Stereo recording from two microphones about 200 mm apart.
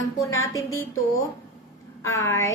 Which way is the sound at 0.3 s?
15° left (ahead or behind).